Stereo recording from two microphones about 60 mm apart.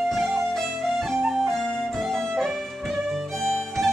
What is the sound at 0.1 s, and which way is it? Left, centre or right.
Music, centre.